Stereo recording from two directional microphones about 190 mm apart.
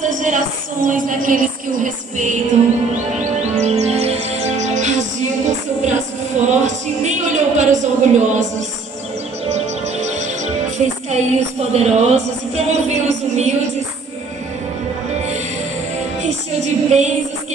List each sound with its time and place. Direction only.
0.0 s music: 40° right (ahead or behind)
15.1 s music: 35° right (ahead or behind)